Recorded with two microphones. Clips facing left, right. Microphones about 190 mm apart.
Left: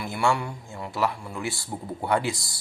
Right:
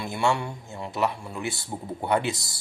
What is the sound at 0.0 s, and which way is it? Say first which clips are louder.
Speech: even; 20° right (ahead or behind).